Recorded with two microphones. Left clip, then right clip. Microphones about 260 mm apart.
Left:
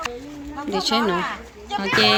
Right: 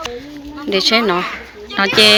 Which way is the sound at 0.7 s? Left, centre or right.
Centre.